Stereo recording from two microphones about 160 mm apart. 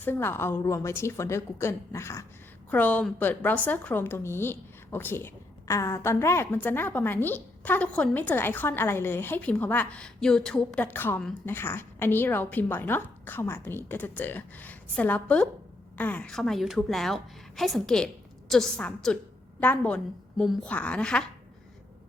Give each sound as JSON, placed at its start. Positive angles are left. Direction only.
{"t": 0.0, "sound": "a woman's voice", "side_deg": 15}